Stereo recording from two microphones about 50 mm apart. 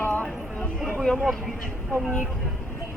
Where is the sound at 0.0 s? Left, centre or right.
Left.